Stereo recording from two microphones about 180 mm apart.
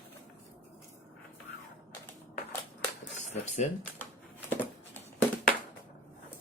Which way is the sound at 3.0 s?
40° left (ahead or behind).